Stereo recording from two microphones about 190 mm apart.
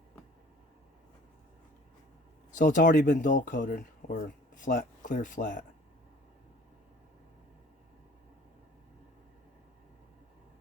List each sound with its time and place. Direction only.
2.6 s speech: 45° left (ahead or behind)